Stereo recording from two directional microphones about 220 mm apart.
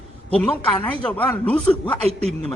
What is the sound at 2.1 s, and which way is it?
Speech, 30° right (ahead or behind).